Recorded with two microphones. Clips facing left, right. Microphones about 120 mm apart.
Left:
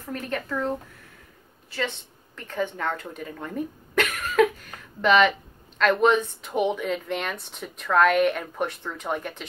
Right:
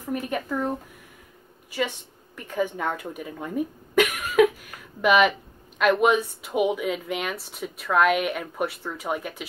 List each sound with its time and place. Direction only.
0.0 s a woman's voice: 15° right (ahead or behind)